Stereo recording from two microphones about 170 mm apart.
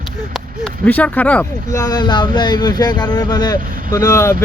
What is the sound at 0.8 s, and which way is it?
Speech, 10° left (ahead or behind).